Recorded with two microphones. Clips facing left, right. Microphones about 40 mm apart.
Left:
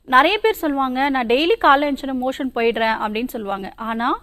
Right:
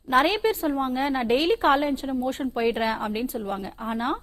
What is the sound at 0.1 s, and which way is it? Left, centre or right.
A woman's voice, left.